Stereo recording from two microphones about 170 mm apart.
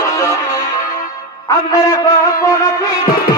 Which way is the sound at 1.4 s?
20° left (ahead or behind).